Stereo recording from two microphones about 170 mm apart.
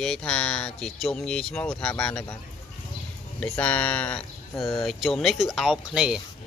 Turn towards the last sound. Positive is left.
turn(degrees=-5)  # may be behind; listen again after turning